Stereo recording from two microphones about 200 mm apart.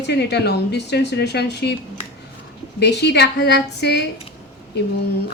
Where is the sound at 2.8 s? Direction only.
55° left (ahead or behind).